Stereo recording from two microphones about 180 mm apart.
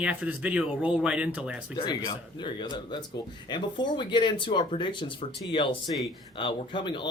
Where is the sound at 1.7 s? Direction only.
25° left (ahead or behind).